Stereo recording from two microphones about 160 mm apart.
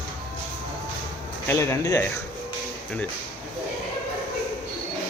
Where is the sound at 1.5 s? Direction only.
15° left (ahead or behind).